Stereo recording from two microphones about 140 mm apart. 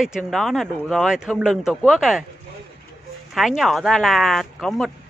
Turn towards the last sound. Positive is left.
turn(degrees=0)  # may be behind; listen again after turning